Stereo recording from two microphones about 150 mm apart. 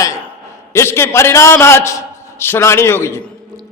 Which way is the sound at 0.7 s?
15° left (ahead or behind).